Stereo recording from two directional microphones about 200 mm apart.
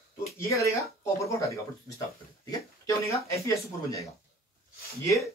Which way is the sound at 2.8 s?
15° left (ahead or behind).